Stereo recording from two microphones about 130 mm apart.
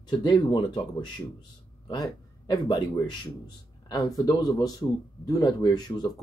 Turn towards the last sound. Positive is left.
turn(degrees=30)  # may be behind; listen again after turning